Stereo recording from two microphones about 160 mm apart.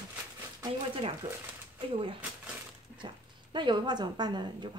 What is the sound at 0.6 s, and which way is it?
Speech, 35° right (ahead or behind).